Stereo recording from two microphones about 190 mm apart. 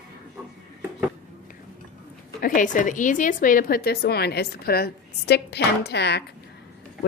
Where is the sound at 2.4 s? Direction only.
45° left (ahead or behind); by 6.2 s 60° left (ahead or behind).